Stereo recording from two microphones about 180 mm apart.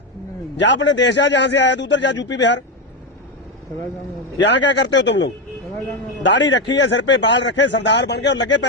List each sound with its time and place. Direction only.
0.6 s a man's voice: 80° left
4.4 s a man's voice: 75° left (ahead or behind)